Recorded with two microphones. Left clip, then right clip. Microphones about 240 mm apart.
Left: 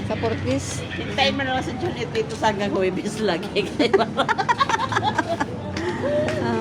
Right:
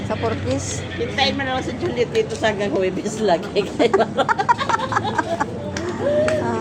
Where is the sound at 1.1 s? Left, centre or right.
Left; by 5.5 s centre.